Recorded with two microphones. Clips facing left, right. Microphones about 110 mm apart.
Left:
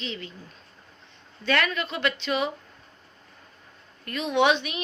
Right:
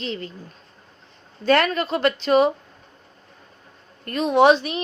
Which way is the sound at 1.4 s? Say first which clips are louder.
Right 7 dB; 40° right (ahead or behind).